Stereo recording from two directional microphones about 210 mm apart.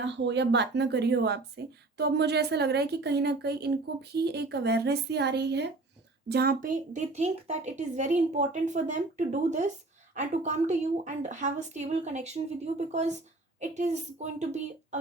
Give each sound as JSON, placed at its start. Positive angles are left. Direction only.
{"t": 0.0, "sound": "speech", "side_deg": -60}